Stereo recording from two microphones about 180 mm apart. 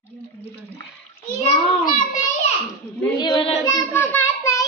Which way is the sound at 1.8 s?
50° left (ahead or behind).